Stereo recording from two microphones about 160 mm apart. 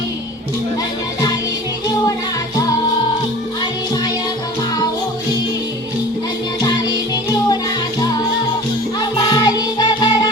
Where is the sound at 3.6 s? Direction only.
25° left (ahead or behind).